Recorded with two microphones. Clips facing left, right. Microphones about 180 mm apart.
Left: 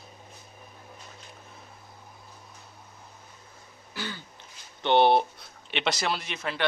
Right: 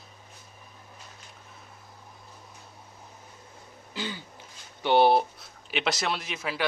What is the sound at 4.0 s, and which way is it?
Throat clearing, 15° right (ahead or behind).